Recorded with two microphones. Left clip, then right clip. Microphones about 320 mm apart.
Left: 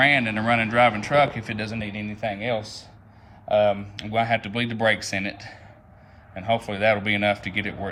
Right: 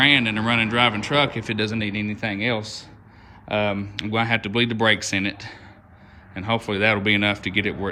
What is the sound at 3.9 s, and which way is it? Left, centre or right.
Speech, centre.